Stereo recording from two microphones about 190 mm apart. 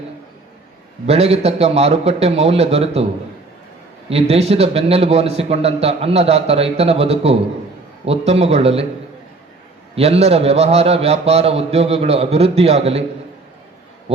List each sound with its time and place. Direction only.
1.0 s a man's voice: 35° right (ahead or behind)
4.1 s a man's voice: 30° right (ahead or behind)
9.9 s a man's voice: 30° right (ahead or behind)